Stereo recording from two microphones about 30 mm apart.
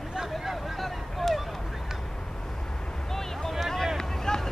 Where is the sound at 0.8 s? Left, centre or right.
Centre.